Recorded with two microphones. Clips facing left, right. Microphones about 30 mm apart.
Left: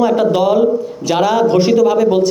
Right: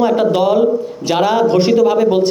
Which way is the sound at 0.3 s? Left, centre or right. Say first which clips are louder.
Even; right.